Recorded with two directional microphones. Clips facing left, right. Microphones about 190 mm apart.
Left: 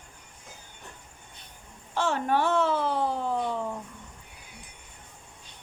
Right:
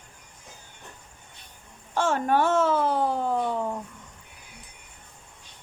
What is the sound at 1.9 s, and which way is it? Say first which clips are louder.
Speech: right 3 dB; 50° right (ahead or behind).